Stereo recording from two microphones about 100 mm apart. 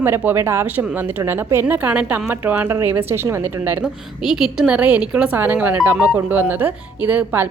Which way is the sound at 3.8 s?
5° right (ahead or behind).